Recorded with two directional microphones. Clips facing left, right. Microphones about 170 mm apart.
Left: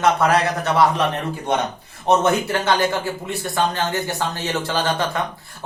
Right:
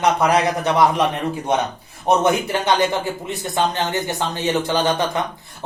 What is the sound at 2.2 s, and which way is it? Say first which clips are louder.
A man's voice: right 1 dB; 20° right (ahead or behind).